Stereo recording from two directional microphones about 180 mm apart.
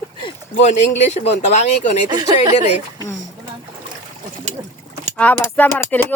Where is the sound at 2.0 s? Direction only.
20° right (ahead or behind).